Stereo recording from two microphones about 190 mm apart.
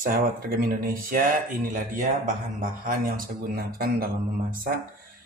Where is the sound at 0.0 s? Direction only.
45° right (ahead or behind).